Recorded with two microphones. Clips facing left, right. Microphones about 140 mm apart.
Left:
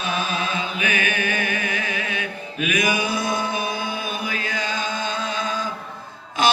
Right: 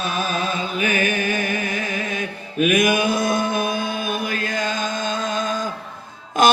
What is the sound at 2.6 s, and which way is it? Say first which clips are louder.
Mantra: right 6 dB; 50° right (ahead or behind).